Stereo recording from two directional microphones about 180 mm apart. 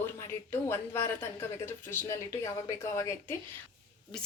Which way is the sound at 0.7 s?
15° left (ahead or behind).